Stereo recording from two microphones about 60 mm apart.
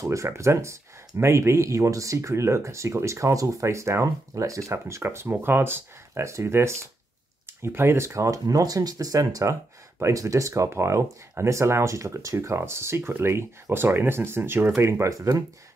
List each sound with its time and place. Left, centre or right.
0.0 s speech: right
4.8 s speech: right
10.7 s speech: right
15.0 s speech: right